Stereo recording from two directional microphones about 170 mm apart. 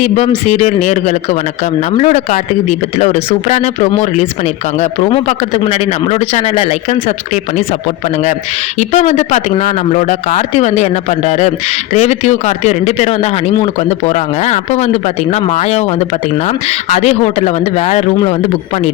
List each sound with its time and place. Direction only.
0.0 s speech: 40° left (ahead or behind)
8.8 s speech: 40° left (ahead or behind)